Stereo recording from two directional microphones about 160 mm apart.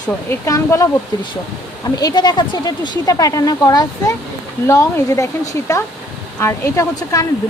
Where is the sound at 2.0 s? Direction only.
25° left (ahead or behind).